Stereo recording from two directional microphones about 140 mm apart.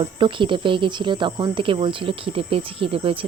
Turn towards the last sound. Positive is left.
turn(degrees=-40)  # may be behind; listen again after turning